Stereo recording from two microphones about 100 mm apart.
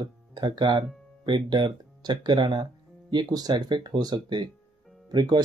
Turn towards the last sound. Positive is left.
turn(degrees=-45)  # may be behind; listen again after turning